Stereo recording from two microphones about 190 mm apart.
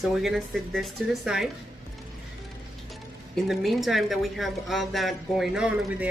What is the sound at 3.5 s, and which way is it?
A woman's voice, centre (ahead or behind).